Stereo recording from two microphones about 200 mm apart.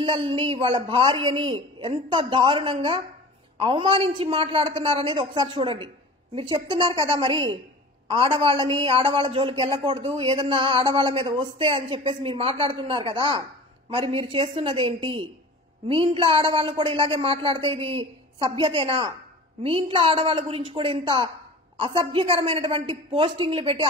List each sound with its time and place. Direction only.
0.0 s a man's voice: 25° right (ahead or behind)